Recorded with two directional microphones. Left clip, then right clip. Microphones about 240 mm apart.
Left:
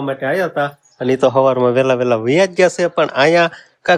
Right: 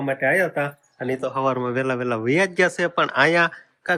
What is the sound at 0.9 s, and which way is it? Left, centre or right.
Speech, left.